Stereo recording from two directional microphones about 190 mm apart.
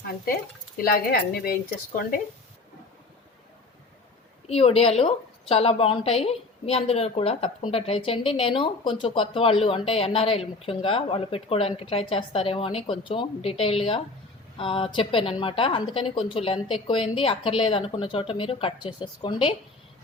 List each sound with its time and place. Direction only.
0.8 s speech: 55° left (ahead or behind)
4.4 s a woman's voice: 30° left (ahead or behind)